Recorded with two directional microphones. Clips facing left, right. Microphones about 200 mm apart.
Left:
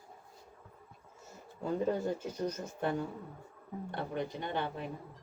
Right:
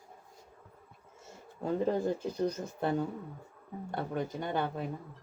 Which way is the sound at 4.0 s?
45° right (ahead or behind).